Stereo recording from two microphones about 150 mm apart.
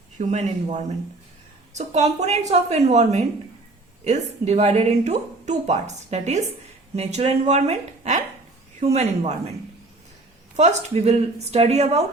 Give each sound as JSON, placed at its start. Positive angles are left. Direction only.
{"t": 0.2, "sound": "speech", "side_deg": -50}
{"t": 10.6, "sound": "speech", "side_deg": -50}